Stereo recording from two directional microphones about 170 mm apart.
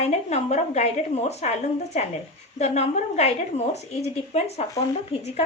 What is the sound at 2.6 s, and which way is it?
A woman's voice, 40° left (ahead or behind).